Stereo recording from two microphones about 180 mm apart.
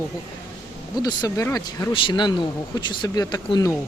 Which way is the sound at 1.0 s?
20° left (ahead or behind).